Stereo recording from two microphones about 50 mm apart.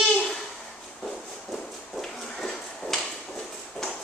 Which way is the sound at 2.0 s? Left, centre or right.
Centre.